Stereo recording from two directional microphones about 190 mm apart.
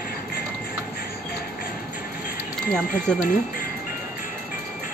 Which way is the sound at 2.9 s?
45° left (ahead or behind).